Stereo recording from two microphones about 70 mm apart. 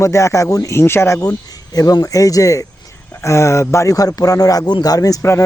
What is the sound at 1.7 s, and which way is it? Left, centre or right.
Speech, left.